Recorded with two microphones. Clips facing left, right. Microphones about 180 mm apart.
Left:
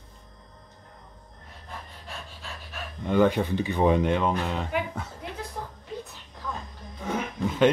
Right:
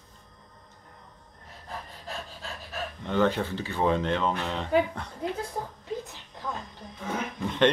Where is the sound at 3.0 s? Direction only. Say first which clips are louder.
Left 4 dB; 15° left (ahead or behind).